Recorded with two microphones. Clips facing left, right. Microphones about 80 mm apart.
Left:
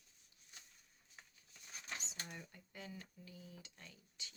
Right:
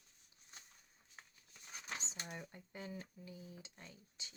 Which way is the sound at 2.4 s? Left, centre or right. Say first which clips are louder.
Right 4 dB; right.